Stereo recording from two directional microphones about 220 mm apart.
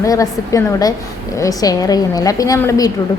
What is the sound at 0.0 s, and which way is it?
A woman's voice, 15° left (ahead or behind).